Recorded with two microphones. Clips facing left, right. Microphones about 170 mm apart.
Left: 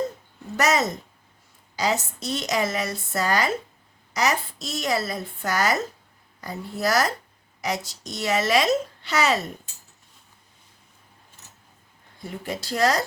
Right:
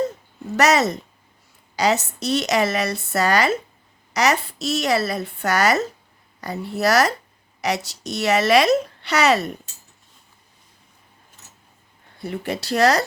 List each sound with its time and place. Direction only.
0.5 s a woman's voice: 75° right (ahead or behind)
12.1 s a woman's voice: 70° right (ahead or behind)